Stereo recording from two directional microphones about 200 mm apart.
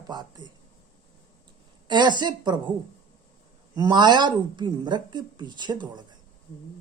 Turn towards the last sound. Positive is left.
turn(degrees=-20)  # may be behind; listen again after turning